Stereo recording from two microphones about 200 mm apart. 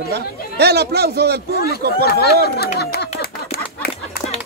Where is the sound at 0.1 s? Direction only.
55° right (ahead or behind).